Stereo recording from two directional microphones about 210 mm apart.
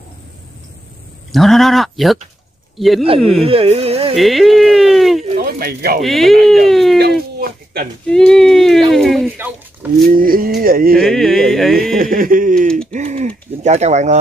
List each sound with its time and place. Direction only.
1.3 s speech: centre (ahead or behind)
3.2 s speech: centre (ahead or behind)
3.4 s a sound: 30° right (ahead or behind)
4.1 s a sound: centre (ahead or behind)
5.4 s speech: 45° right (ahead or behind)
5.9 s speech: centre (ahead or behind)
7.3 s a sound: 45° right (ahead or behind)
8.1 s speech: 5° left (ahead or behind)
10.0 s music: 40° right (ahead or behind)
11.0 s speech: centre (ahead or behind)
11.7 s music: 45° right (ahead or behind)
12.9 s a sound: 35° right (ahead or behind)
13.6 s speech: 30° right (ahead or behind)